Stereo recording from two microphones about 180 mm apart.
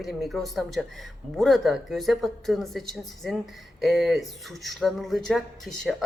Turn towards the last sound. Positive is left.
turn(degrees=0)  # may be behind; listen again after turning